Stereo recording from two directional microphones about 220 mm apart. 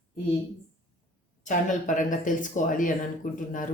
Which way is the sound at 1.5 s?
35° left (ahead or behind).